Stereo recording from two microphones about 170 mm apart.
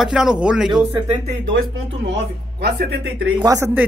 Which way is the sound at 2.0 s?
80° right.